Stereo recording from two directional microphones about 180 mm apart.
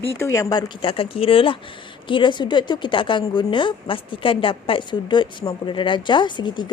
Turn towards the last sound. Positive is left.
turn(degrees=25)  # may be behind; listen again after turning